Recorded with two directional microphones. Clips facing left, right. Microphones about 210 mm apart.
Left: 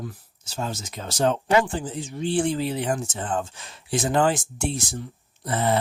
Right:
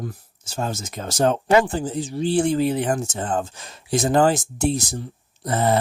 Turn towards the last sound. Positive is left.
turn(degrees=-40)  # may be behind; listen again after turning